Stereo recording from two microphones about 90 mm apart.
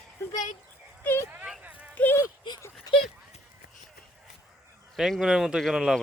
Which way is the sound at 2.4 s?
60° left (ahead or behind).